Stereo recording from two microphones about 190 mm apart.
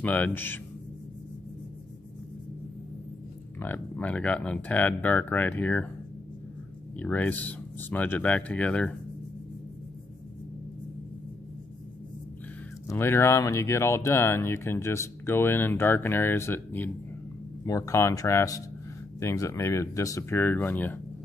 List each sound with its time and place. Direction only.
0.0 s speech: 10° left (ahead or behind)
3.5 s speech: 10° left (ahead or behind)
7.0 s speech: 10° left (ahead or behind)
12.8 s speech: 15° left (ahead or behind)